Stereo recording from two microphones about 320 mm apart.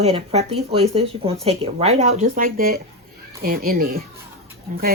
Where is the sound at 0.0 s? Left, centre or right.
Centre.